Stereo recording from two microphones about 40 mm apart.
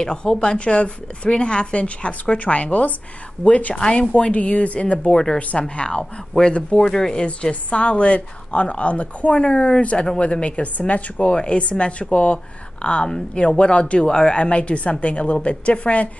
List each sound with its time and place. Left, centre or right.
0.0 s a woman's voice: centre
3.7 s speech: left
5.1 s speech: centre
5.5 s a woman's voice: left
11.1 s a woman's voice: left